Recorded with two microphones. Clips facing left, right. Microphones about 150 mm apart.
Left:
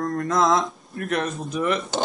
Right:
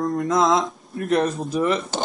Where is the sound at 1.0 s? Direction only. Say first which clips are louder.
Right 5 dB; 35° right (ahead or behind).